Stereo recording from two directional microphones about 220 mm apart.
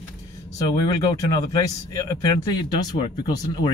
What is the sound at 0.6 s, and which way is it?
Speech, 20° left (ahead or behind).